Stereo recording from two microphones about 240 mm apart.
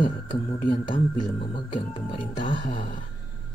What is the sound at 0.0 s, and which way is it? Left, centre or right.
Speech, left.